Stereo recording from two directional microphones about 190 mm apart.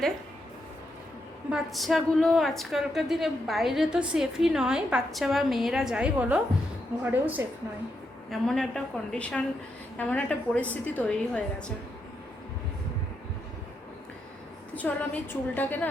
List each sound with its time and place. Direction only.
1.5 s a woman's voice: centre (ahead or behind)
8.3 s a woman's voice: 5° left (ahead or behind)
14.8 s a woman's voice: 10° left (ahead or behind)